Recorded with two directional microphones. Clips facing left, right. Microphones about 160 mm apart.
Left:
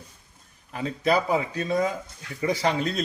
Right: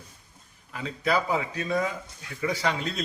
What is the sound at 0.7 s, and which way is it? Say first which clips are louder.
A man's voice: left 3 dB; 35° left (ahead or behind).